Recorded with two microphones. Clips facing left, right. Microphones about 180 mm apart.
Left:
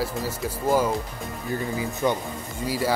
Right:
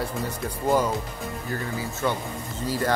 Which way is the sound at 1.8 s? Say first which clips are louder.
Left 3 dB; 15° left (ahead or behind).